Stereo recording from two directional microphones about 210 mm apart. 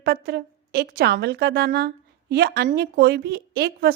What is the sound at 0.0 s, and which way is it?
A woman's voice, 50° right (ahead or behind).